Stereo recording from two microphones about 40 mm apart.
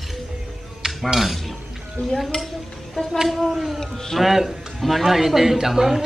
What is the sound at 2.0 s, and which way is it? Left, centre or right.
Stir, left.